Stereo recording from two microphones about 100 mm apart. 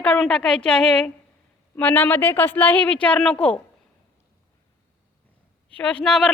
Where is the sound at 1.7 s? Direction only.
20° left (ahead or behind).